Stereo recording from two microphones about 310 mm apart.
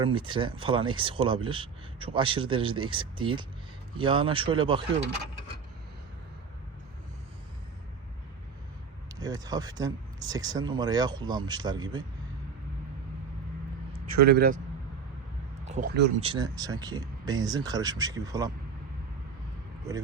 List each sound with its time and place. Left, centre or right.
0.0 s speech: centre
9.2 s speech: centre
14.2 s speech: right
15.6 s speech: right